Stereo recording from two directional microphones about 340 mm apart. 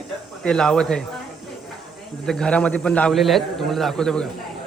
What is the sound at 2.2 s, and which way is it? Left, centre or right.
Speech, centre.